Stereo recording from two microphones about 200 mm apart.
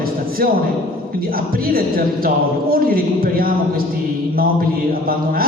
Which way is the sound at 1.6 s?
45° right (ahead or behind).